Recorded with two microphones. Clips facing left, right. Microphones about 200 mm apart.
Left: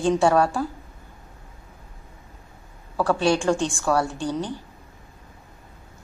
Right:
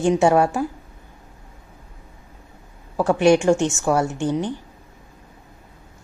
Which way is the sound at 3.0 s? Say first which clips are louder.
Right 5 dB; 20° right (ahead or behind).